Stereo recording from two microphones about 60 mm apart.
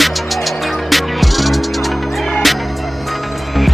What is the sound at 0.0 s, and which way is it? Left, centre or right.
Music, centre.